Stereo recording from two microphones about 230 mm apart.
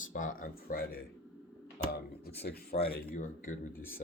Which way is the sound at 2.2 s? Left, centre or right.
Left.